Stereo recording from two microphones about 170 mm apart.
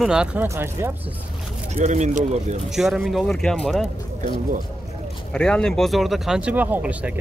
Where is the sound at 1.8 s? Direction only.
45° right (ahead or behind).